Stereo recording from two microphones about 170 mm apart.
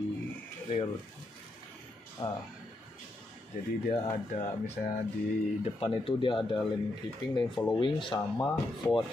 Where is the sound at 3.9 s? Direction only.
35° left (ahead or behind).